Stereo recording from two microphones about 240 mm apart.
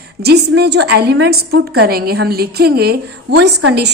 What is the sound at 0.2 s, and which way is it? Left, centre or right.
A woman's voice, right.